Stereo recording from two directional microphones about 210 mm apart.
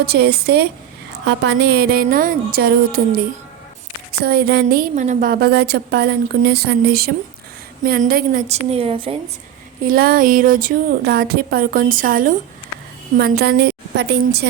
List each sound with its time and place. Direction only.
0.0 s a woman's voice: 50° right (ahead or behind); by 9.1 s 25° right (ahead or behind)
9.8 s a woman's voice: 45° right (ahead or behind)